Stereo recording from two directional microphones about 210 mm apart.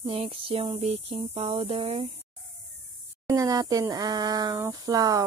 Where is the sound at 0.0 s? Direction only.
25° right (ahead or behind).